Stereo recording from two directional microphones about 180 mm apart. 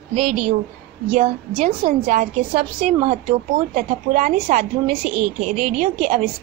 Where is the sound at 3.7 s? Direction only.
40° right (ahead or behind).